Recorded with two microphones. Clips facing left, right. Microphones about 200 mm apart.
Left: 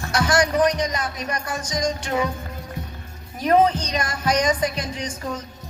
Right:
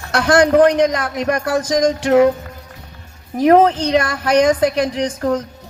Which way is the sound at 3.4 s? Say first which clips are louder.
Right 7 dB; 65° right (ahead or behind).